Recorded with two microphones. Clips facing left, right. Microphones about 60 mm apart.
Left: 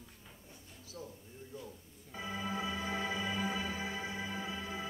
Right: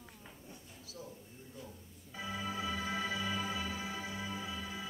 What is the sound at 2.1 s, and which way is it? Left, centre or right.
Music, left.